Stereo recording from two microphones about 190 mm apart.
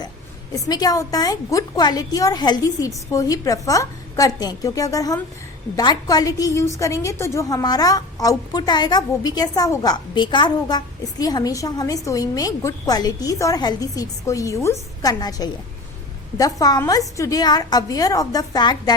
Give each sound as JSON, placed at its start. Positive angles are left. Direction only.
{"t": 0.5, "sound": "a woman's voice", "side_deg": 20}